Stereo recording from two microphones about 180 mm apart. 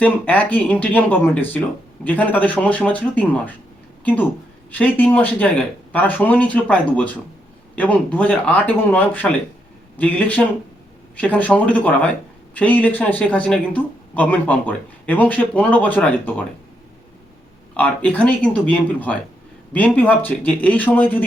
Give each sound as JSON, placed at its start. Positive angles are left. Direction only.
{"t": 0.0, "sound": "speech", "side_deg": 10}
{"t": 17.7, "sound": "speech", "side_deg": 10}